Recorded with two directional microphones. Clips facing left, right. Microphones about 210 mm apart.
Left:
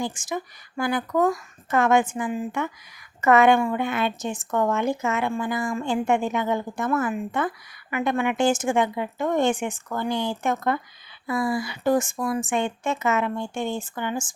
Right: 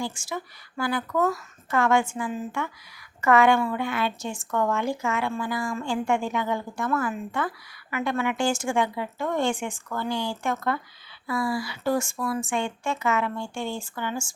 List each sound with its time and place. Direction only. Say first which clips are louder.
0.0 s a woman's voice: left 3 dB; 20° left (ahead or behind)